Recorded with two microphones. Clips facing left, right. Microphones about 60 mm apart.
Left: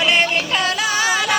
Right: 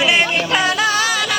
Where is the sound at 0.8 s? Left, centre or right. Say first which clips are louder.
Right 1 dB; left.